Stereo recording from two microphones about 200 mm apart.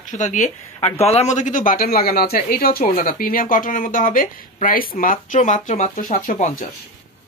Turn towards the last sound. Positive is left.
turn(degrees=40)  # may be behind; listen again after turning